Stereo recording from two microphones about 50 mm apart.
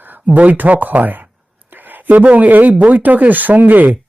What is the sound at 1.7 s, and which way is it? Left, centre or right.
Speech, right.